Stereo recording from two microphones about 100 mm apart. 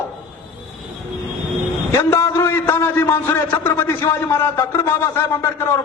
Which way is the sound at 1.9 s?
25° left (ahead or behind).